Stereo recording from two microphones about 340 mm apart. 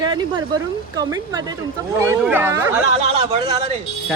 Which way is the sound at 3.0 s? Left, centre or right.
Centre.